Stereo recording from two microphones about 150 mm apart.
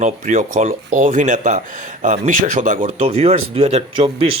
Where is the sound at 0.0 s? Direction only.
60° right (ahead or behind).